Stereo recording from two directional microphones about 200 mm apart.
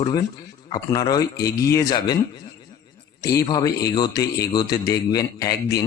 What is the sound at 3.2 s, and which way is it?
A man's voice, 20° left (ahead or behind).